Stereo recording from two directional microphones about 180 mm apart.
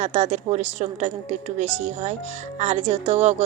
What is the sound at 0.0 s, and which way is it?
A woman's voice, 40° right (ahead or behind).